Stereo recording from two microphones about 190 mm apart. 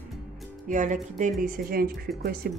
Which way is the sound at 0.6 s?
40° right (ahead or behind).